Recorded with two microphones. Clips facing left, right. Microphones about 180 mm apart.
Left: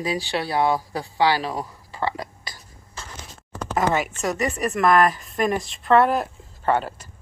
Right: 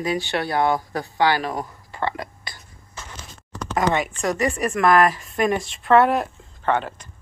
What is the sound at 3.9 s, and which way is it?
A woman's voice, 5° left (ahead or behind).